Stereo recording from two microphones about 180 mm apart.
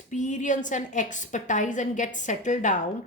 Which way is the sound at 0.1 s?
45° left (ahead or behind).